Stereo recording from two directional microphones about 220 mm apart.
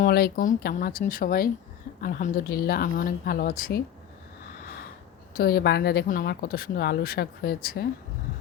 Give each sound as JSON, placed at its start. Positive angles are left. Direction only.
{"t": 0.0, "sound": "speech", "side_deg": 45}
{"t": 5.3, "sound": "speech", "side_deg": 45}